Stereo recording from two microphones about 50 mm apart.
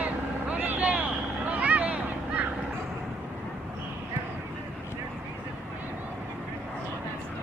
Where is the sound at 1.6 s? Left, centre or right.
Right.